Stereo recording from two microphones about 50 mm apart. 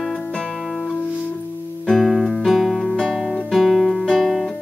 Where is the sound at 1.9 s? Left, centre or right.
Centre.